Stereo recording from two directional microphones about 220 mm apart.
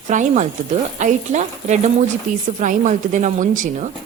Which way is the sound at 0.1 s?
35° right (ahead or behind).